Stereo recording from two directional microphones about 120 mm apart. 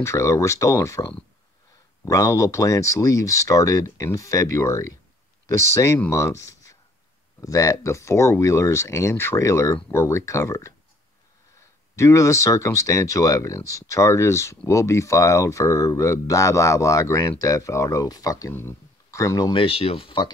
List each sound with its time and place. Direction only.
0.0 s speech: 25° left (ahead or behind)
11.9 s speech: 25° left (ahead or behind)
18.5 s speech: 20° left (ahead or behind)
19.5 s speech: 50° left (ahead or behind)